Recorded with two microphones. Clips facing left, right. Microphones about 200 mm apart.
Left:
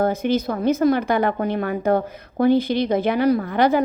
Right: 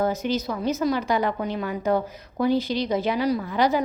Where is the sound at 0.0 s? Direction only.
55° left (ahead or behind).